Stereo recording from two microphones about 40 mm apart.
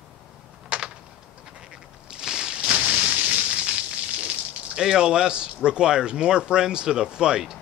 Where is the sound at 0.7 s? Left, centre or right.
Right.